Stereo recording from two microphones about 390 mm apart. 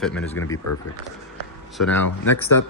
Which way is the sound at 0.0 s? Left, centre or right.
Centre.